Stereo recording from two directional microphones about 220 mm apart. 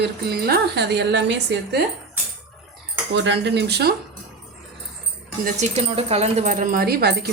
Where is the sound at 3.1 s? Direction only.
55° right (ahead or behind).